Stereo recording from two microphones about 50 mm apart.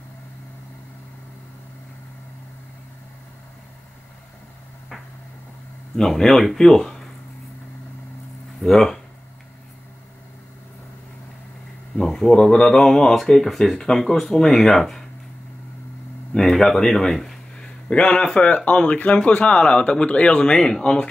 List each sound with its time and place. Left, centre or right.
5.9 s speech: centre
8.6 s speech: centre
12.0 s speech: centre
16.3 s speech: centre
17.6 s speech: centre